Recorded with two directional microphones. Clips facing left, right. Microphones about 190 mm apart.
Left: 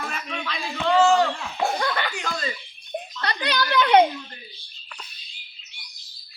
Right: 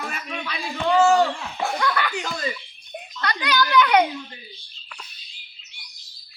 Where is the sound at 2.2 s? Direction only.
10° right (ahead or behind).